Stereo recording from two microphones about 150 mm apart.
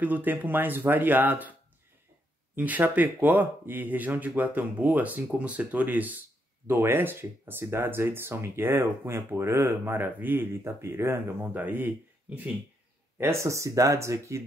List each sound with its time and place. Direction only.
0.0 s speech: 10° right (ahead or behind)
2.5 s speech: 10° right (ahead or behind)
13.2 s speech: 20° right (ahead or behind)